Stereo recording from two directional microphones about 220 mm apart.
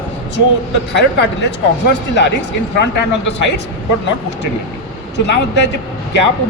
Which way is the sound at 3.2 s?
50° left (ahead or behind).